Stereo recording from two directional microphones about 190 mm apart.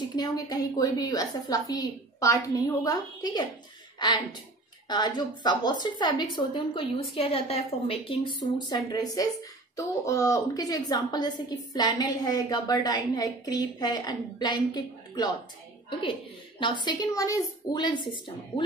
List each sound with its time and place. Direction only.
0.1 s a woman's voice: 20° left (ahead or behind)